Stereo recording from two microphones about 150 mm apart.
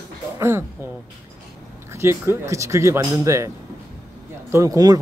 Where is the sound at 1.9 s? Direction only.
20° right (ahead or behind).